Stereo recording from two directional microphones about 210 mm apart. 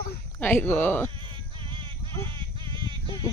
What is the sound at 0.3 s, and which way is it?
Speech, 10° left (ahead or behind).